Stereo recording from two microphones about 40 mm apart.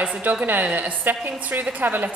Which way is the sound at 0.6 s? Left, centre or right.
Right.